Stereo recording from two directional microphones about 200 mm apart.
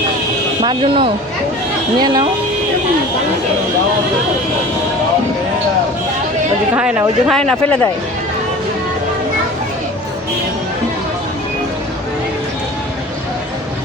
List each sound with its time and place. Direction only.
0.6 s speech: 25° right (ahead or behind)
6.7 s speech: 5° right (ahead or behind)